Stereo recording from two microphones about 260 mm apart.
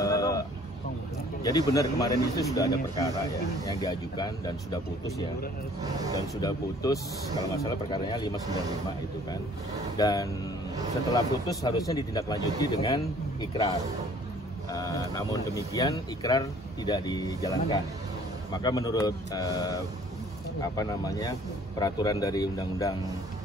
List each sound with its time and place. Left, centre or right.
0.0 s vehicle: centre
1.4 s speech: centre
6.4 s speech: centre
9.9 s speech: centre
14.7 s speech: centre